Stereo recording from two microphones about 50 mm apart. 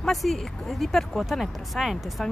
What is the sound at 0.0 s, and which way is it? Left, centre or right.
Speech, centre.